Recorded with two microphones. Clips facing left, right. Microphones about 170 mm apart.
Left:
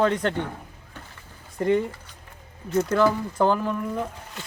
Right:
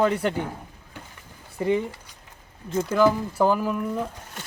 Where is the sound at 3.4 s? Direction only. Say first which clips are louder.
Even; 5° right (ahead or behind).